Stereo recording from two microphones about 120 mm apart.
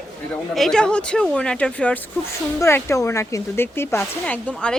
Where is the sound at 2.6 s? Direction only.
20° left (ahead or behind).